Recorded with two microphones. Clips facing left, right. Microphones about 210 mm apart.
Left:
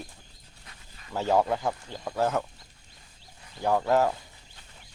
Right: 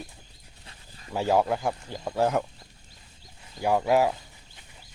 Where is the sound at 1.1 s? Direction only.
10° right (ahead or behind).